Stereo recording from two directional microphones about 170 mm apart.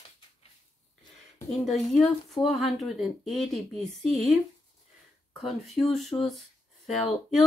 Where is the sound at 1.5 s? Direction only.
Centre (ahead or behind).